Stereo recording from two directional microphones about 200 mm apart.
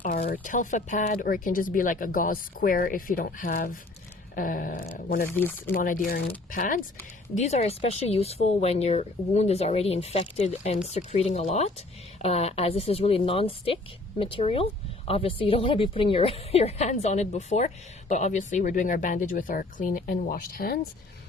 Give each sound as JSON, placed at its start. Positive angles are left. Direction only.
{"t": 0.0, "sound": "speech", "side_deg": 45}
{"t": 5.3, "sound": "speech", "side_deg": 10}
{"t": 5.7, "sound": "speech", "side_deg": 40}